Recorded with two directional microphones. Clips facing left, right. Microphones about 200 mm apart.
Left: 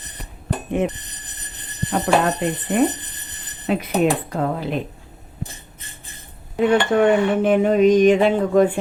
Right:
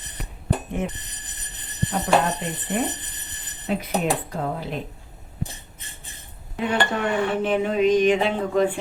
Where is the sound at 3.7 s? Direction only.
85° left.